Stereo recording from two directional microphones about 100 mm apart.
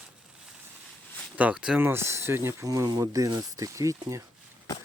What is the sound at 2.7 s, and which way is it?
Speech, 40° right (ahead or behind).